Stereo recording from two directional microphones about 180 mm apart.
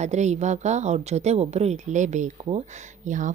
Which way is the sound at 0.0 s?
40° right (ahead or behind).